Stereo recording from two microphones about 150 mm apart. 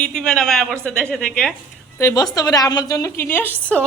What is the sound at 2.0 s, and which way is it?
A woman's voice, 20° left (ahead or behind).